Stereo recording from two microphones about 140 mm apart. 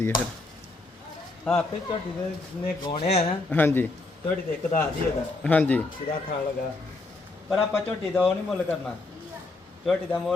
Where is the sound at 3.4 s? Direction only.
15° left (ahead or behind).